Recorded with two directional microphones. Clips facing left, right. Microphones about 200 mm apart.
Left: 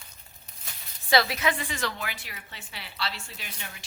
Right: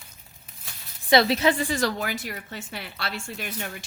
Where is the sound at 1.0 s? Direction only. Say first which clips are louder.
Right 5 dB; 25° right (ahead or behind); by 3.8 s 55° right (ahead or behind).